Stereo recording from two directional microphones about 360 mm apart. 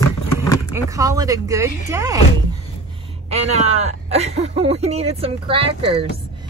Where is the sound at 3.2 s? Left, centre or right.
Centre.